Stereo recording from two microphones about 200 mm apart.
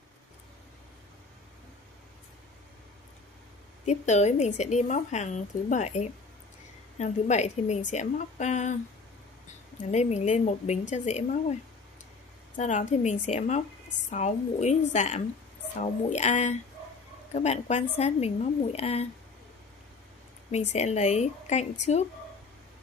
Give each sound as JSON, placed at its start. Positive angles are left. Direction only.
{"t": 3.8, "sound": "a woman's voice", "side_deg": 35}
{"t": 9.8, "sound": "a woman's voice", "side_deg": 35}
{"t": 12.5, "sound": "a woman's voice", "side_deg": 35}
{"t": 20.5, "sound": "a woman's voice", "side_deg": 35}